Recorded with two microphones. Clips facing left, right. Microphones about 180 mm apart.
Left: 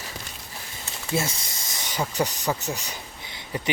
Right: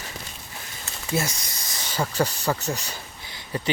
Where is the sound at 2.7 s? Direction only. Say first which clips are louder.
Even; 15° left (ahead or behind).